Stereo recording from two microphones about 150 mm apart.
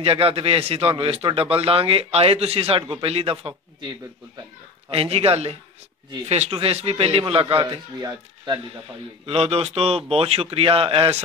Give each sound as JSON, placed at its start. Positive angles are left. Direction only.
{"t": 0.0, "sound": "a man's voice", "side_deg": -40}
{"t": 4.9, "sound": "a man's voice", "side_deg": -40}
{"t": 9.2, "sound": "a man's voice", "side_deg": -40}